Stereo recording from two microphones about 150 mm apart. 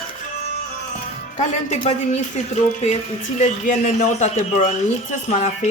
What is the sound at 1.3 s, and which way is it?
Speech, 50° left (ahead or behind).